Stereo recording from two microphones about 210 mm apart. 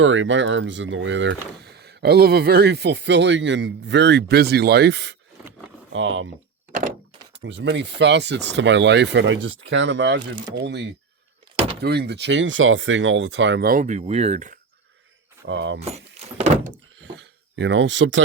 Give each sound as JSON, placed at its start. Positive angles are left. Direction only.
{"t": 0.0, "sound": "speech", "side_deg": -65}
{"t": 5.9, "sound": "speech", "side_deg": -65}
{"t": 7.4, "sound": "speech", "side_deg": -60}
{"t": 15.4, "sound": "speech", "side_deg": -60}
{"t": 15.8, "sound": "keys jangling", "side_deg": -30}
{"t": 16.7, "sound": "a sound", "side_deg": -60}